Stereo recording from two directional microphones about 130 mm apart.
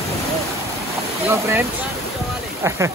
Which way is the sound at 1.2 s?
20° right (ahead or behind).